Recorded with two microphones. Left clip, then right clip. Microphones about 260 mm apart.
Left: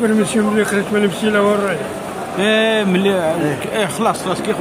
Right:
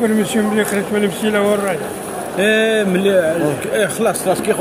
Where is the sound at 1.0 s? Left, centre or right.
Centre.